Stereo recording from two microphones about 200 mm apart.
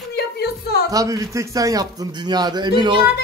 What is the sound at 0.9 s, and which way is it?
A man's voice, 15° right (ahead or behind).